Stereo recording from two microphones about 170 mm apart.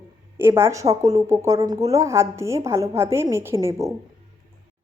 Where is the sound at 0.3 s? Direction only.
15° right (ahead or behind).